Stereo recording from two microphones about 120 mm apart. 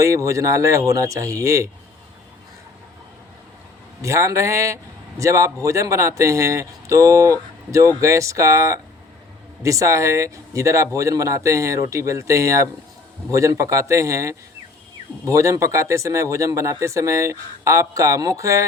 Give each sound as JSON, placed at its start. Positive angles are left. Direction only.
{"t": 0.0, "sound": "a man's voice", "side_deg": -25}
{"t": 4.0, "sound": "a man's voice", "side_deg": -25}